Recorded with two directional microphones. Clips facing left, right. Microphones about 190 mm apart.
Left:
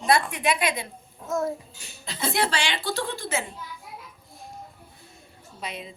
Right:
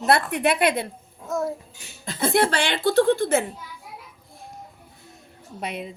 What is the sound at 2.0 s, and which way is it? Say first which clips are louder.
Speech: right 6 dB; 50° right (ahead or behind).